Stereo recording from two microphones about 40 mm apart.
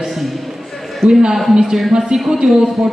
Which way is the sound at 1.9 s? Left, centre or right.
Centre.